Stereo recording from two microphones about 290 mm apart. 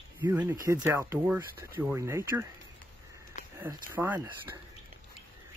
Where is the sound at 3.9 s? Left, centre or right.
Centre.